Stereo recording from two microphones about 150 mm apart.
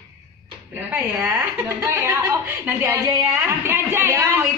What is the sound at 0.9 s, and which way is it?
A woman's voice, 15° right (ahead or behind).